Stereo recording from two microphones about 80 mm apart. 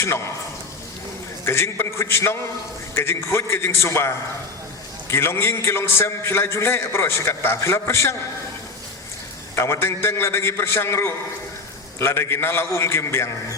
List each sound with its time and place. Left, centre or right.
1.5 s a man's voice: left
9.6 s a man's voice: left